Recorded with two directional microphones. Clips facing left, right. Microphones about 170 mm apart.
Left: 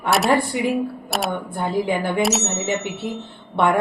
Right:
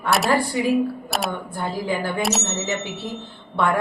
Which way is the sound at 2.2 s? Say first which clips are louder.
Left 3 dB; centre (ahead or behind).